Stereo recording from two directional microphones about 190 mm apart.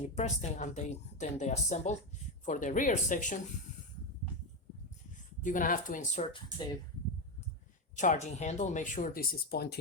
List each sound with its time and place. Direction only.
0.0 s speech: 35° left (ahead or behind)
5.4 s speech: 45° left (ahead or behind)
7.9 s speech: 40° left (ahead or behind); by 9.7 s 55° left (ahead or behind)